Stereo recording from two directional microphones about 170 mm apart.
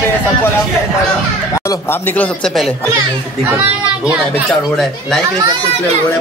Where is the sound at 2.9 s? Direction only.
15° right (ahead or behind); by 5.2 s centre (ahead or behind).